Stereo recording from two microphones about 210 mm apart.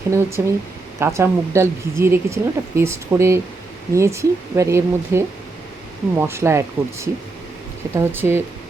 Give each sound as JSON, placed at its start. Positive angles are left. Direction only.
{"t": 0.1, "sound": "speech", "side_deg": -15}